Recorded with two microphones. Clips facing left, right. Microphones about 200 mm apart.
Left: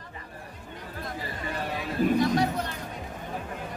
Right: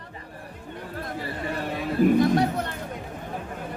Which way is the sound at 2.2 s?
55° right (ahead or behind).